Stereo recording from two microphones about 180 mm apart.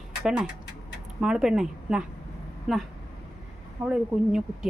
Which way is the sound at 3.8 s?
5° right (ahead or behind).